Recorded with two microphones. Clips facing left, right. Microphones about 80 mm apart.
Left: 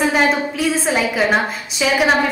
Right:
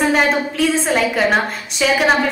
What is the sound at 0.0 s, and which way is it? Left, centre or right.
A woman's voice, centre.